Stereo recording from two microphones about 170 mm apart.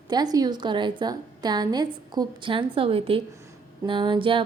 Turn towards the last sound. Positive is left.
turn(degrees=-30)  # may be behind; listen again after turning